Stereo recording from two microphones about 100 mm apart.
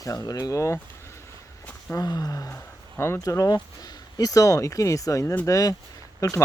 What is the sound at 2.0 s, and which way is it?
Speech, 40° left (ahead or behind).